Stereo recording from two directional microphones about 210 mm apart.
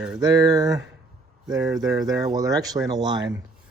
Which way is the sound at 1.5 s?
15° right (ahead or behind).